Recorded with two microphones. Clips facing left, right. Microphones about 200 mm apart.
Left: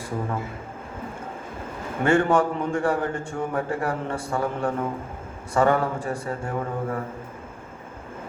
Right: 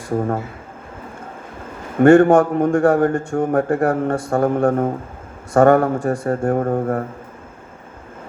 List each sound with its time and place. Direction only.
0.1 s a man's voice: 50° right (ahead or behind)
2.0 s a man's voice: 45° right (ahead or behind)